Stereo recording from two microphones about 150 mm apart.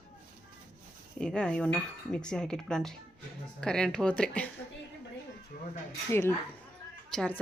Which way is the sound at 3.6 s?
5° left (ahead or behind).